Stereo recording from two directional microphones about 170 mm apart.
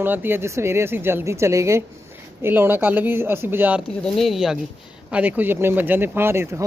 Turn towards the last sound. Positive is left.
turn(degrees=-15)  # may be behind; listen again after turning